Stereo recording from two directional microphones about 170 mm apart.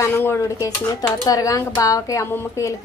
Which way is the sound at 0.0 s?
15° left (ahead or behind).